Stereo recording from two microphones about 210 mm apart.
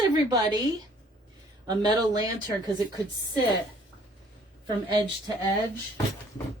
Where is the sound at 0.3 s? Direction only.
20° right (ahead or behind).